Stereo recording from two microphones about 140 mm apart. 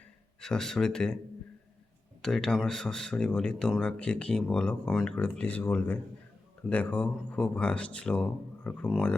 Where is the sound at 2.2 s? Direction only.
5° left (ahead or behind).